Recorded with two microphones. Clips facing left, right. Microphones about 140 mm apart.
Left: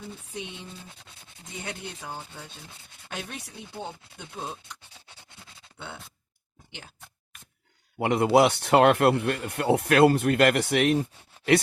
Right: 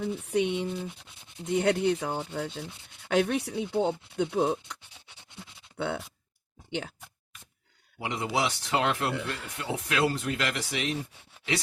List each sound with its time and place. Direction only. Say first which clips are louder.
0.0 s speech: right 11 dB; 65° right (ahead or behind)
7.9 s speech: left 10 dB; 60° left (ahead or behind)